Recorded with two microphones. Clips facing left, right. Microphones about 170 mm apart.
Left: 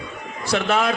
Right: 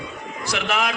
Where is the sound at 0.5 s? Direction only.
30° left (ahead or behind).